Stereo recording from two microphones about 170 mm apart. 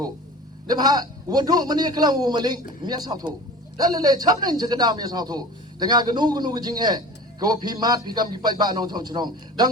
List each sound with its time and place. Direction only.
0.7 s a man's voice: 25° right (ahead or behind)